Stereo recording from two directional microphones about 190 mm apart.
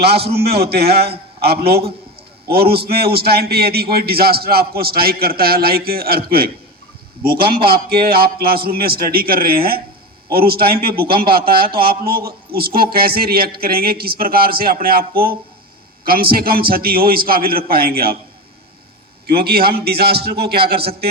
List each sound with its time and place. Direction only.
0.0 s a man's voice: 60° right (ahead or behind)
7.3 s a man's voice: 50° right (ahead or behind)
19.3 s a man's voice: 55° right (ahead or behind)